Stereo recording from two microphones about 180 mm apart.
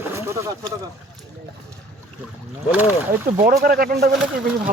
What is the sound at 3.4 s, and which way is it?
Speech, 55° right (ahead or behind).